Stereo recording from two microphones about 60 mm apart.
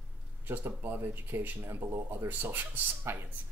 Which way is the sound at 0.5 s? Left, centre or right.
Right.